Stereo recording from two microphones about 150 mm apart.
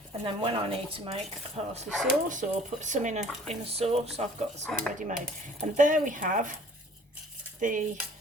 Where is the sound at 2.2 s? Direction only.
60° right (ahead or behind).